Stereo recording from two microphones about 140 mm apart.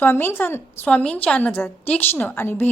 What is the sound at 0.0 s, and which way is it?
A woman's voice, 15° left (ahead or behind).